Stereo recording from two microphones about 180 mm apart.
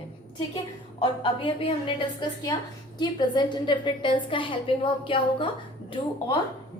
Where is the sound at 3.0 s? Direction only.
25° left (ahead or behind).